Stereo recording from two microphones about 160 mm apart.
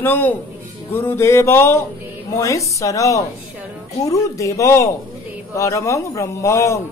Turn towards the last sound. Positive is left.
turn(degrees=20)  # may be behind; listen again after turning